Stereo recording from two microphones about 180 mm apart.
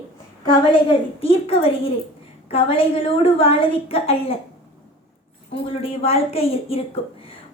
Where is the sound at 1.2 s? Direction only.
35° left (ahead or behind).